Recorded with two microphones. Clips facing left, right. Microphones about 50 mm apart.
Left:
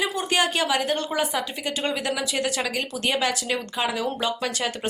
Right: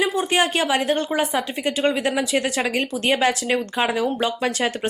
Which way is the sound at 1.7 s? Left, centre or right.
Right.